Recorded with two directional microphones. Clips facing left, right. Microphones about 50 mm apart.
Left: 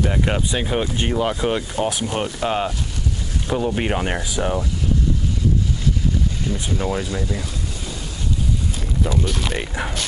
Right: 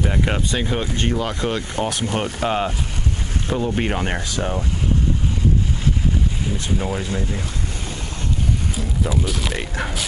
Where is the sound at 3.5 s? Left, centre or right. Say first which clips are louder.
Left 1 dB; centre.